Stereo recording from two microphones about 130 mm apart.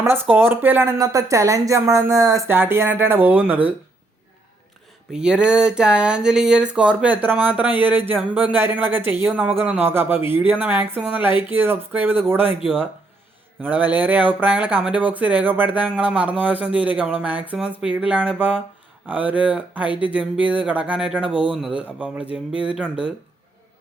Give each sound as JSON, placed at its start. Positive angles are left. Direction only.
{"t": 0.0, "sound": "speech", "side_deg": -15}
{"t": 5.1, "sound": "speech", "side_deg": -5}
{"t": 13.6, "sound": "speech", "side_deg": -15}